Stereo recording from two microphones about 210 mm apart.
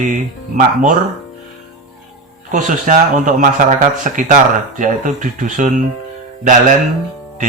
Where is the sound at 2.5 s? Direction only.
40° right (ahead or behind).